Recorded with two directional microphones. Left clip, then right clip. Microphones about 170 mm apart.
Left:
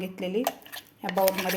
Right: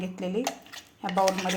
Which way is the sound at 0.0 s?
10° left (ahead or behind).